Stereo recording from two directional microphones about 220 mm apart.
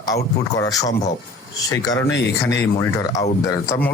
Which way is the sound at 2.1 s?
55° left (ahead or behind).